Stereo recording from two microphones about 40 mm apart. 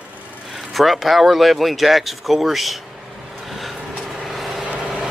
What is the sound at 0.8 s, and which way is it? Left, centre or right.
Speech, centre.